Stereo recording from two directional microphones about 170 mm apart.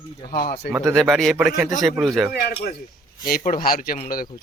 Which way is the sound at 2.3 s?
70° left (ahead or behind).